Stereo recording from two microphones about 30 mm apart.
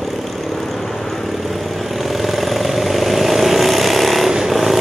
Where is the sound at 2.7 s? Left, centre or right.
Centre.